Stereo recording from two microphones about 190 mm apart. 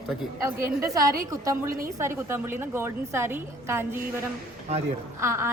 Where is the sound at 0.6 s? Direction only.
15° right (ahead or behind).